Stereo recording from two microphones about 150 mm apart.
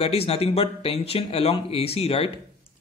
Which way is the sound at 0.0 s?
40° left (ahead or behind).